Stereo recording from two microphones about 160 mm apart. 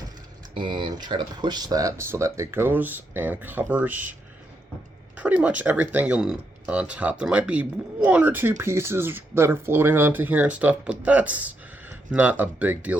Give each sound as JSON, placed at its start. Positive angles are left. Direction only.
{"t": 0.5, "sound": "speech", "side_deg": -30}
{"t": 5.1, "sound": "speech", "side_deg": -10}